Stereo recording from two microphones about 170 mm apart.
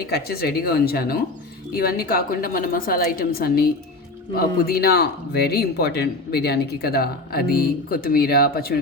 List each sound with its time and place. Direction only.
0.0 s speech: 65° left (ahead or behind)